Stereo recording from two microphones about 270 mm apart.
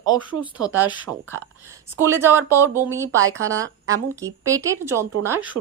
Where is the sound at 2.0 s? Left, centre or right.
Centre.